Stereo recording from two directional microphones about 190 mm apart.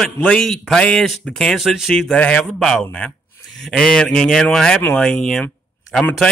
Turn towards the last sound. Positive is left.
turn(degrees=5)  # may be behind; listen again after turning